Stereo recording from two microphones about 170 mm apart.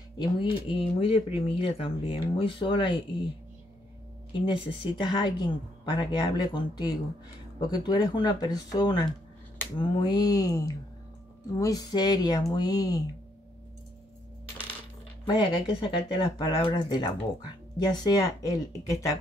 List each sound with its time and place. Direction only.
0.2 s speech: 30° left (ahead or behind)
4.3 s speech: 30° left (ahead or behind)
15.2 s speech: 25° left (ahead or behind)